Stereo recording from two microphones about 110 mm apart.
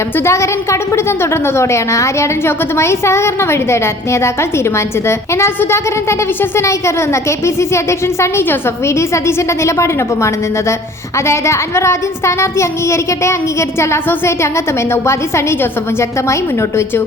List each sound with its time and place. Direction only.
0.3 s a woman's voice: 25° left (ahead or behind)